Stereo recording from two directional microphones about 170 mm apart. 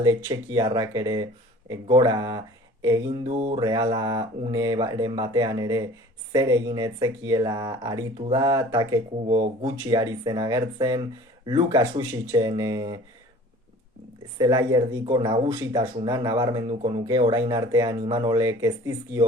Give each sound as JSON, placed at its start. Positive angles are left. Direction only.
{"t": 0.0, "sound": "speech", "side_deg": -20}
{"t": 14.3, "sound": "speech", "side_deg": -25}